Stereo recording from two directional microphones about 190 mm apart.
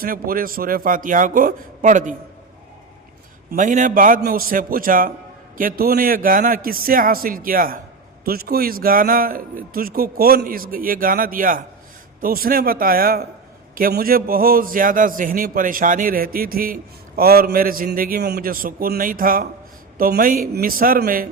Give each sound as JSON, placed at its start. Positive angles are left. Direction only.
{"t": 0.0, "sound": "a man's voice", "side_deg": -50}
{"t": 3.5, "sound": "a man's voice", "side_deg": -40}